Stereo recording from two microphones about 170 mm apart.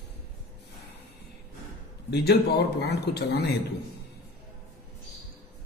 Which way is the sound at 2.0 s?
75° left (ahead or behind).